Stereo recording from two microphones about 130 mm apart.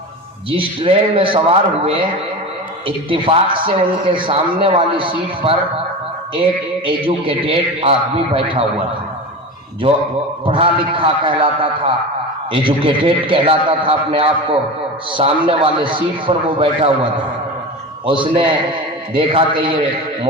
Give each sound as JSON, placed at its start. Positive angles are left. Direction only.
{"t": 0.5, "sound": "a man's voice", "side_deg": -40}
{"t": 6.8, "sound": "a man's voice", "side_deg": -45}
{"t": 9.8, "sound": "a man's voice", "side_deg": -45}